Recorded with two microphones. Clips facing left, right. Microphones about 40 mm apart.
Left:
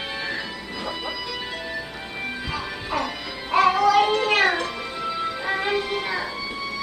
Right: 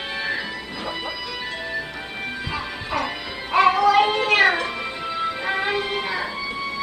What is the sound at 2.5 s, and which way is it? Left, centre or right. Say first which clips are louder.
Music: right 1 dB; centre.